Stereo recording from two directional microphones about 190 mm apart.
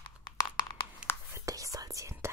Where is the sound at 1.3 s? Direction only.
15° right (ahead or behind).